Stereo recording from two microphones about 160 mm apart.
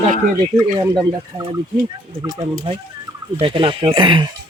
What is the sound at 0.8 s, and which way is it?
Speech, 25° right (ahead or behind).